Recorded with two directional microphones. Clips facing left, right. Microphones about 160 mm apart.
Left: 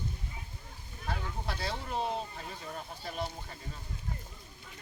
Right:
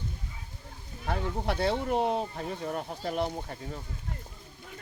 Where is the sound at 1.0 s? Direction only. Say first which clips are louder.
Right 7 dB; 60° right (ahead or behind).